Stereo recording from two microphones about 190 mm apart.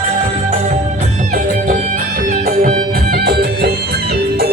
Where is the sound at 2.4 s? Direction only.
45° right (ahead or behind).